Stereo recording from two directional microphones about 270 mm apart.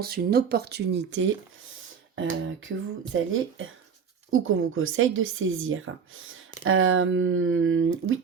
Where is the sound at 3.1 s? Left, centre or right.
Right.